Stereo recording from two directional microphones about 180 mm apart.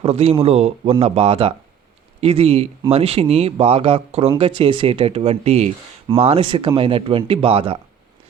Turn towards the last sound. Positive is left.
turn(degrees=-30)  # may be behind; listen again after turning